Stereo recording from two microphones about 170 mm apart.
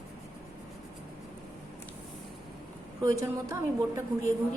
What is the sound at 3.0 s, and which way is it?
A woman's voice, 20° right (ahead or behind).